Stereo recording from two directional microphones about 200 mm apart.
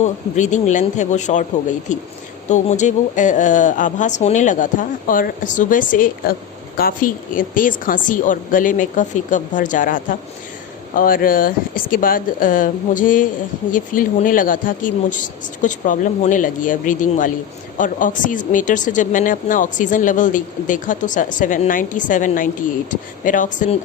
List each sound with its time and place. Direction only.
0.0 s speech: 35° left (ahead or behind)